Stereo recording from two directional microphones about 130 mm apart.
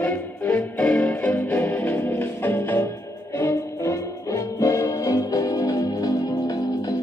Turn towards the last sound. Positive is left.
turn(degrees=30)  # may be behind; listen again after turning